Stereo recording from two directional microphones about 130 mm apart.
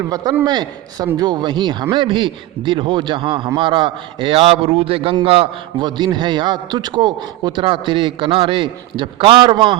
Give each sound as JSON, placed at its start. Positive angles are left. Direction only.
{"t": 0.4, "sound": "a man's voice", "side_deg": -35}